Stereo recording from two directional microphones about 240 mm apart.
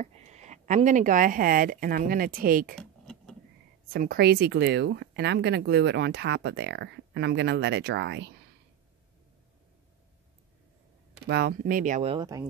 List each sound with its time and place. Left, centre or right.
0.0 s speech: right
2.8 s a sound: centre
3.9 s speech: right
11.2 s speech: right; by 12.4 s centre